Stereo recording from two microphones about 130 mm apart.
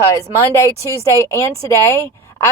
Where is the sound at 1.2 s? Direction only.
25° left (ahead or behind).